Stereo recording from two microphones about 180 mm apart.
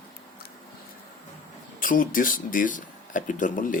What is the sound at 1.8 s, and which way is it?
Speech, 50° left (ahead or behind).